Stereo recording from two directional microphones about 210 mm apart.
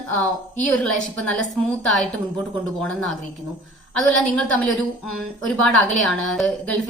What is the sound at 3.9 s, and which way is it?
Speech, 5° left (ahead or behind).